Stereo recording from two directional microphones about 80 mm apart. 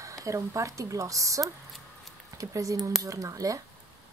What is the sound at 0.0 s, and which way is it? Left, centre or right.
Speech, right.